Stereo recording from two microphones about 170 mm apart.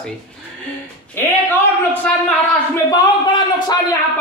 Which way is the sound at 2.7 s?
25° left (ahead or behind).